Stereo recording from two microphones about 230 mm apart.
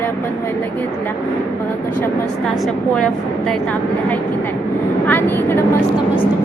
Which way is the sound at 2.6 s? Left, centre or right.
Centre.